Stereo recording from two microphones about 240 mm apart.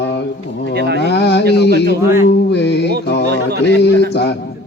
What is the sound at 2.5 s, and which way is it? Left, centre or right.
Music, left.